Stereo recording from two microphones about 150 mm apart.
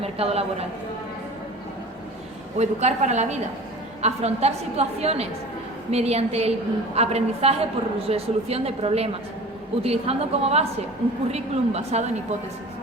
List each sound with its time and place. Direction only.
0.0 s a woman's voice: 45° right (ahead or behind)
2.6 s a woman's voice: 50° right (ahead or behind)